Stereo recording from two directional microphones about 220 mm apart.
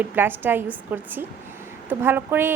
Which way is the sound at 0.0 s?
10° right (ahead or behind).